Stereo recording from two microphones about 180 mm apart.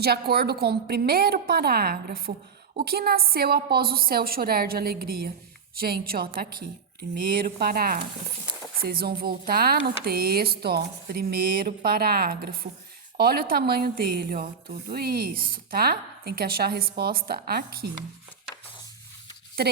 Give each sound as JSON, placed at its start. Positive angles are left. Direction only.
{"t": 0.0, "sound": "a woman's voice", "side_deg": -60}
{"t": 19.6, "sound": "speech", "side_deg": -60}